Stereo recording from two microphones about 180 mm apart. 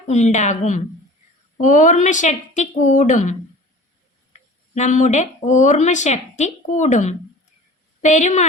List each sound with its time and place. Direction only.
0.1 s a woman's voice: 40° left (ahead or behind)